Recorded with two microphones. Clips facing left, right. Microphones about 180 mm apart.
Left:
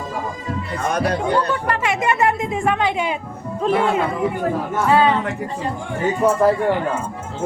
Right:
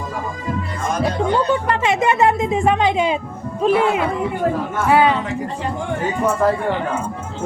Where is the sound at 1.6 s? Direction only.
25° right (ahead or behind).